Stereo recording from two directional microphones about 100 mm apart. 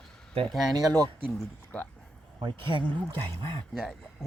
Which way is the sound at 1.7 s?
10° left (ahead or behind).